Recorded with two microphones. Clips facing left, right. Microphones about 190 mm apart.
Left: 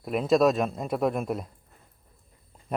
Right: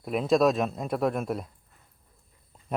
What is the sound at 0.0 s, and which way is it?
Speech, centre (ahead or behind).